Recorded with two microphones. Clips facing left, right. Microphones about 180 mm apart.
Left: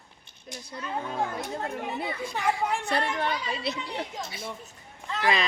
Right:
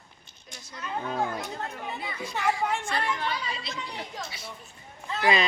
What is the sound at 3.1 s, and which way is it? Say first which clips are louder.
Speech: left 3 dB; 55° left (ahead or behind).